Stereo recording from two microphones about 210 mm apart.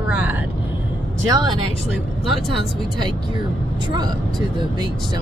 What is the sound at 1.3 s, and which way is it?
Speech, 20° right (ahead or behind).